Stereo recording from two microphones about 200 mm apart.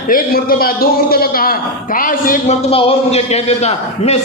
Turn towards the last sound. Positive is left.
turn(degrees=30)  # may be behind; listen again after turning